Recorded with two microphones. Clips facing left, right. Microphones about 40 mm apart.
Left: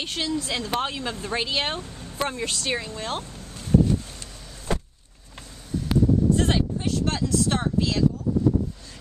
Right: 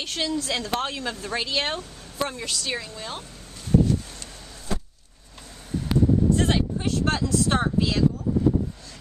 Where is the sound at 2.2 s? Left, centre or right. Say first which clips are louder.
Left 1 dB; left.